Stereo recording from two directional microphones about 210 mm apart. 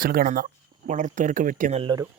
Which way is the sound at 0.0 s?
40° right (ahead or behind).